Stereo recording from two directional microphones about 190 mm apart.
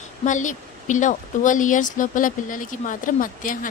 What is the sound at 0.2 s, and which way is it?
Speech, 40° left (ahead or behind).